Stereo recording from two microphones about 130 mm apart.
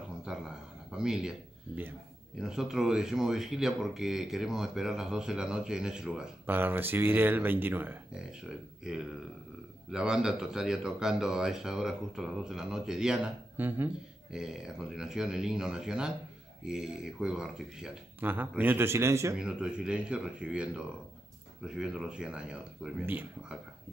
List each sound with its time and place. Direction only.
0.3 s a sound: 5° right (ahead or behind)
0.9 s speech: 5° right (ahead or behind)
2.4 s speech: 5° right (ahead or behind)
14.3 s speech: 5° right (ahead or behind)
18.2 s a man's voice: 15° right (ahead or behind)
19.3 s speech: 5° right (ahead or behind)